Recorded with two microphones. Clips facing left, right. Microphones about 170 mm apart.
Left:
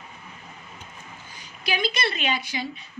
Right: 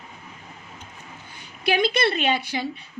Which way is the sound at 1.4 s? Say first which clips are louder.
Right 6 dB; 60° right (ahead or behind).